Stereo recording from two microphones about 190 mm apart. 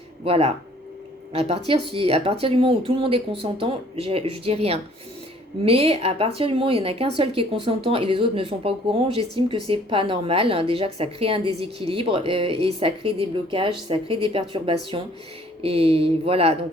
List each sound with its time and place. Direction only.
0.3 s a woman's voice: 30° right (ahead or behind)